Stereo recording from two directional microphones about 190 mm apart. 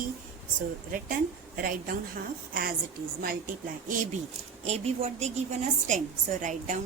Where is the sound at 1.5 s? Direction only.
50° right (ahead or behind).